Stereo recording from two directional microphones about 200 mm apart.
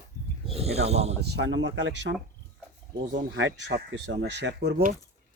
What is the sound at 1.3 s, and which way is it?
Speech, 65° right (ahead or behind).